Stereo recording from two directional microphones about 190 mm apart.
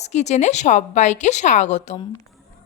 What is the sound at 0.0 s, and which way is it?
A woman's voice, 35° left (ahead or behind).